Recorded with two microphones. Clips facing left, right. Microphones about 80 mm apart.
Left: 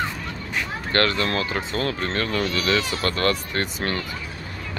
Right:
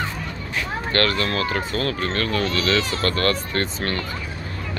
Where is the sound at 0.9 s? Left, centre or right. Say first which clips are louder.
Even; left.